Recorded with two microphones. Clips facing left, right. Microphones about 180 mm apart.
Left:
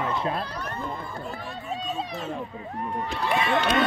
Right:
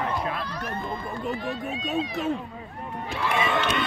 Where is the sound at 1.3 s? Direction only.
65° right (ahead or behind).